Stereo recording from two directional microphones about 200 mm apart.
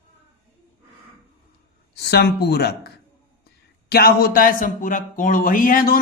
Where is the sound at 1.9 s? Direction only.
55° left (ahead or behind).